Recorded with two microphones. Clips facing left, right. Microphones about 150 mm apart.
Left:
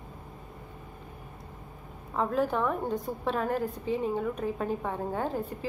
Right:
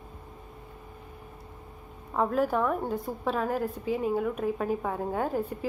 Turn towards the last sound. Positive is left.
turn(degrees=-10)  # may be behind; listen again after turning